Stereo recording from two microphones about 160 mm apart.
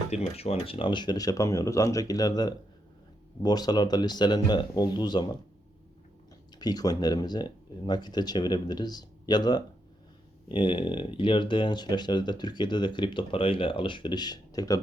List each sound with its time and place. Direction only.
0.1 s speech: 40° left (ahead or behind)
6.6 s speech: 25° left (ahead or behind)